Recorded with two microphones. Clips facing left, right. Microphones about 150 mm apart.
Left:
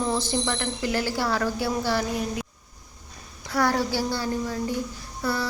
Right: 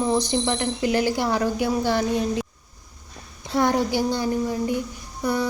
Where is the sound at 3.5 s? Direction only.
20° right (ahead or behind).